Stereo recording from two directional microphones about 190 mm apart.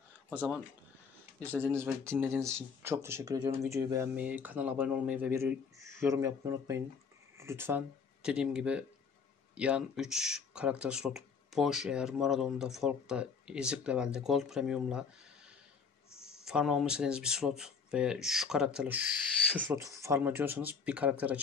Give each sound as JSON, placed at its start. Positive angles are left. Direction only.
{"t": 0.3, "sound": "speech", "side_deg": -10}
{"t": 16.4, "sound": "speech", "side_deg": 0}